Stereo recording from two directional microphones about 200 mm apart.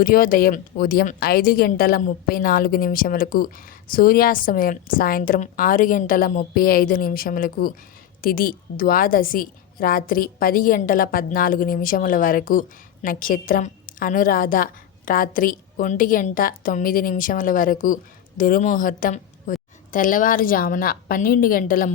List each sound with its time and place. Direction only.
0.0 s a woman's voice: 45° left (ahead or behind)